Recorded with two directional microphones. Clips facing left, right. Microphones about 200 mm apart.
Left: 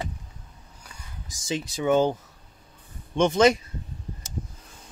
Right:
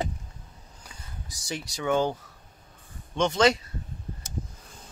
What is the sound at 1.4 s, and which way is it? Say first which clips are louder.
Speech: left 5 dB; 20° left (ahead or behind).